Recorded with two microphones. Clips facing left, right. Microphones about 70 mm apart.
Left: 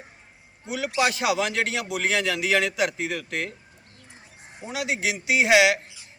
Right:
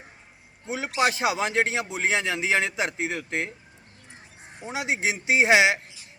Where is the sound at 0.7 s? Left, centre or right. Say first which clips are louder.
Even; right.